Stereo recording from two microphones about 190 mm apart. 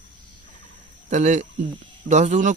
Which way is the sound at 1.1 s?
40° right (ahead or behind).